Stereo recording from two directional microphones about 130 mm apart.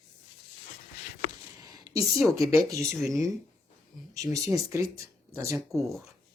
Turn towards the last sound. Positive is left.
turn(degrees=0)  # may be behind; listen again after turning